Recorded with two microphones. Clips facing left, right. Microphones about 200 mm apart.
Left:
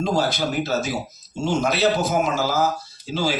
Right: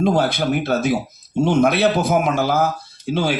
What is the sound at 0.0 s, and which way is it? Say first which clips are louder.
Speech: right 4 dB; 55° right (ahead or behind).